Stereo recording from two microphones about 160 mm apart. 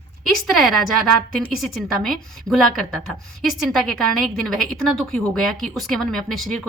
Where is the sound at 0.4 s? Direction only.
Centre (ahead or behind).